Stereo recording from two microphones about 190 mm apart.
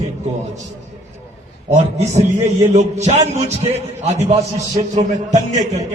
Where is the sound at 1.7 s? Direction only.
35° right (ahead or behind).